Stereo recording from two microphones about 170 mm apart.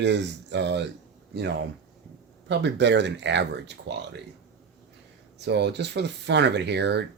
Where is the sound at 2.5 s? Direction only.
90° right.